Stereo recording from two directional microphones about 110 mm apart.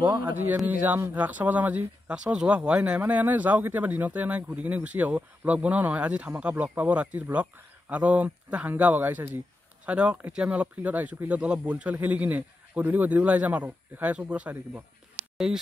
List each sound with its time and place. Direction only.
0.0 s speech: 15° right (ahead or behind)